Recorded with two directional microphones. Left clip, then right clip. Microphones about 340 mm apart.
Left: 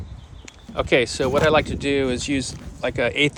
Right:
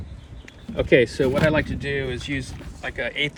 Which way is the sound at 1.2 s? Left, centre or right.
Right.